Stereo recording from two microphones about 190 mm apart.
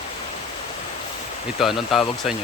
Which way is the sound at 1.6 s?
Centre (ahead or behind).